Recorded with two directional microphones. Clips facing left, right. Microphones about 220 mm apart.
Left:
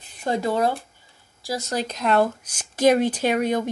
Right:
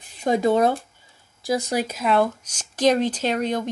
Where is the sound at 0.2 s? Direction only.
15° right (ahead or behind).